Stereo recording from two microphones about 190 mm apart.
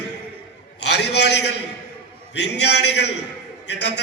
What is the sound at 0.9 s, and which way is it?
Speech, 65° left (ahead or behind).